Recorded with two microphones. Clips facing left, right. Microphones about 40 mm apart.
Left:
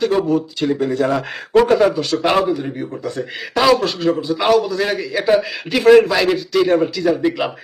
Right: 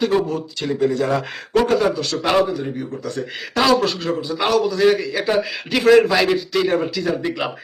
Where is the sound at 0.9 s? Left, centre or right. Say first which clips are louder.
Left 2 dB; centre.